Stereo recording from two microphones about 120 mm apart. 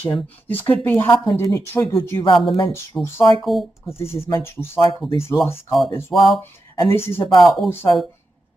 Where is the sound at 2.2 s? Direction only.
45° left (ahead or behind).